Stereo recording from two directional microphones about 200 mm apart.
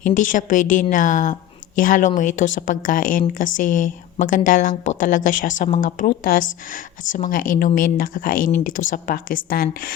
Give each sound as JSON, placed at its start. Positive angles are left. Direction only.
{"t": 0.0, "sound": "a woman's voice", "side_deg": 40}